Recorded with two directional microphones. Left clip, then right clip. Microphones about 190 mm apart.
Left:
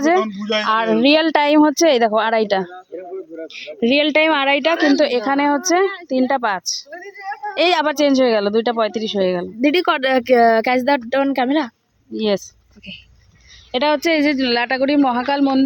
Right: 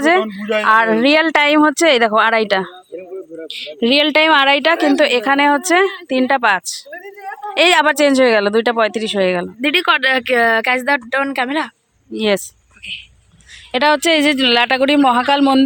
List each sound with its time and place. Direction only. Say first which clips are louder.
0.0 s speech: right 2 dB; centre (ahead or behind)
9.6 s speech: right 2 dB; 35° left (ahead or behind)
12.1 s speech: right 3 dB; centre (ahead or behind)
13.7 s speech: right 3 dB; 5° left (ahead or behind)